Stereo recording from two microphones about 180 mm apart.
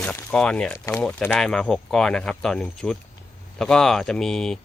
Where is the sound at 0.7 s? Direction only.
15° left (ahead or behind).